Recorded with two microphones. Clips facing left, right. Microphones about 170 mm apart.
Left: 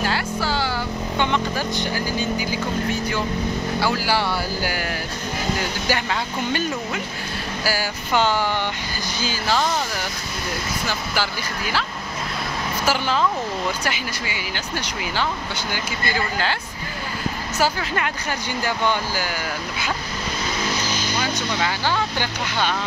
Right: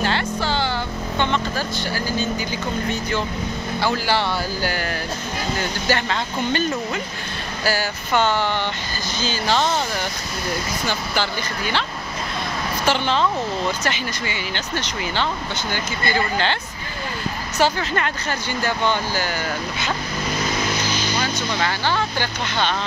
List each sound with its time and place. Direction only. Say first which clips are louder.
0.0 s vehicle: right 1 dB; 5° left (ahead or behind)
1.1 s speech: even; 15° left (ahead or behind)
7.6 s speech: right 3 dB; 10° left (ahead or behind)
10.9 s speech: right 2 dB; 5° left (ahead or behind)
12.8 s speech: right 1 dB; 5° left (ahead or behind)
17.6 s speech: right 3 dB; 5° left (ahead or behind)
21.2 s speech: left 1 dB; 10° left (ahead or behind)